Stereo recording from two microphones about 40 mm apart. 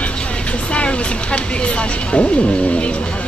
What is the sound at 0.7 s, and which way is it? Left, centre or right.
Speech, left.